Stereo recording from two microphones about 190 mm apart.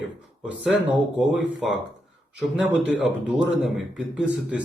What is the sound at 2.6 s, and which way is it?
Speech, 5° right (ahead or behind).